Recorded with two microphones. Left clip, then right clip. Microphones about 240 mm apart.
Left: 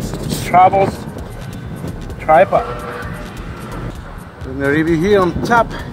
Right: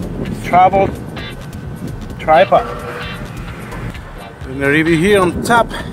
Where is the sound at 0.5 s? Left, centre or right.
Centre.